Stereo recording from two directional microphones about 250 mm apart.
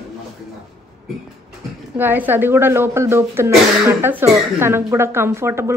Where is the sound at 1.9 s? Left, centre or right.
Centre.